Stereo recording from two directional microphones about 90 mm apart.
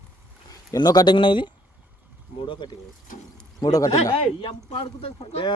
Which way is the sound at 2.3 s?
65° left (ahead or behind).